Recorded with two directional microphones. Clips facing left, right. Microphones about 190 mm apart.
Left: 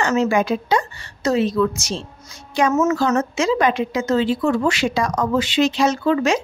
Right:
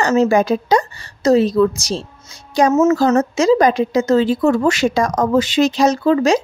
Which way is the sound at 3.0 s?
40° right (ahead or behind).